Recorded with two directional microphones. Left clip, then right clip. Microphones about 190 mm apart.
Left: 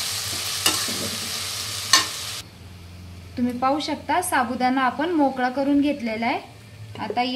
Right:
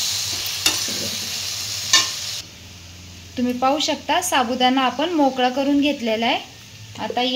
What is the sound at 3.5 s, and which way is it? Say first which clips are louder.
Speech: right 4 dB; 20° right (ahead or behind).